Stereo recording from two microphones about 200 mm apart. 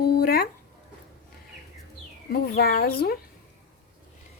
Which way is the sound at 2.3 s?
50° left (ahead or behind).